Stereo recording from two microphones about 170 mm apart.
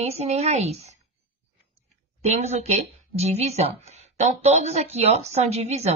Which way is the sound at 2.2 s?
40° right (ahead or behind).